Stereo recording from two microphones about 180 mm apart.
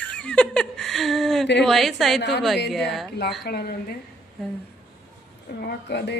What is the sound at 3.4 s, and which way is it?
Speech, 60° left (ahead or behind).